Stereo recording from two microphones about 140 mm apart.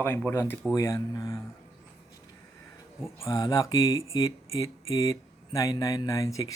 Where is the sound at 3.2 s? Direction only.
25° left (ahead or behind).